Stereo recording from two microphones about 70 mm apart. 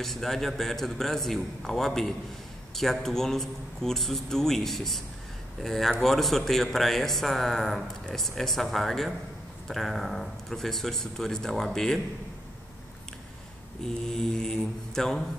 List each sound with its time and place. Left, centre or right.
0.0 s speech: centre
13.8 s mantra: centre